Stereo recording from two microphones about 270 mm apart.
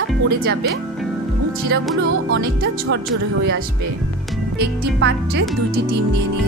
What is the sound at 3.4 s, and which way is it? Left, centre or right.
A woman's voice, right.